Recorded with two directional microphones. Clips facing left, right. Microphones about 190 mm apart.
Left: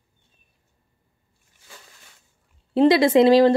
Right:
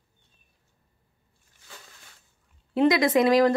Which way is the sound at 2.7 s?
30° left (ahead or behind).